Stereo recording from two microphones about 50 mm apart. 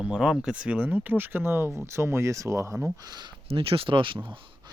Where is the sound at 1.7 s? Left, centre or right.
Right.